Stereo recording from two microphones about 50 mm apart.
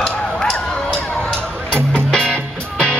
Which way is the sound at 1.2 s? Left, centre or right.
Centre.